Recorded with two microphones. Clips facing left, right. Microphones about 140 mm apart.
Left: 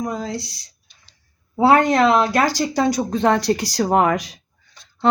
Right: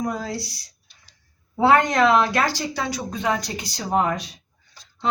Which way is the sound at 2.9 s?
50° left (ahead or behind).